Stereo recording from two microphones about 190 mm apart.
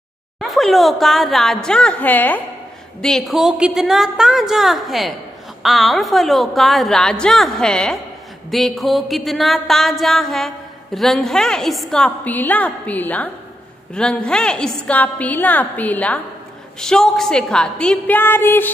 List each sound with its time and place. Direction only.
0.4 s a woman's voice: centre (ahead or behind)